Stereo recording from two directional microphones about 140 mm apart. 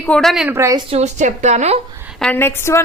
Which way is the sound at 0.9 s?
50° right (ahead or behind).